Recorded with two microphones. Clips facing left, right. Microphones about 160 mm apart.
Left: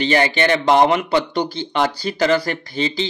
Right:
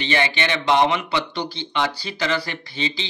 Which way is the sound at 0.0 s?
40° left (ahead or behind).